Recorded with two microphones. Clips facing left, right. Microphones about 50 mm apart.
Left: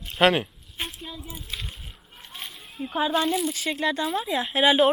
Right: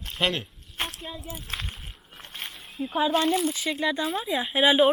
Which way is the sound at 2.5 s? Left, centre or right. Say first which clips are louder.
Right 1 dB; centre.